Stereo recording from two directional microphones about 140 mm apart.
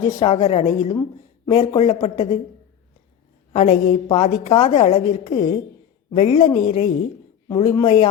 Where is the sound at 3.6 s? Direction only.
55° left (ahead or behind).